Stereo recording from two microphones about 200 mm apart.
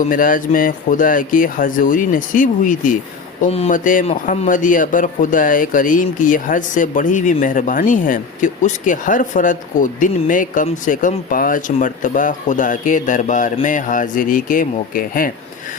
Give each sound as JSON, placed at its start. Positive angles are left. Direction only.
{"t": 0.0, "sound": "speech", "side_deg": 45}